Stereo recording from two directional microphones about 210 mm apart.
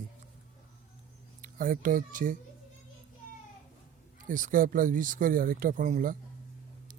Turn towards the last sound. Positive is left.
turn(degrees=-40)  # may be behind; listen again after turning